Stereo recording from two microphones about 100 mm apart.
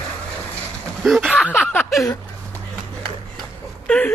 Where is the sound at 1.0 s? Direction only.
Centre (ahead or behind).